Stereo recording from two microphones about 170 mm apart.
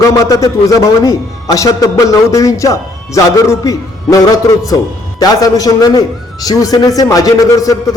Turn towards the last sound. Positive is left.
turn(degrees=20)  # may be behind; listen again after turning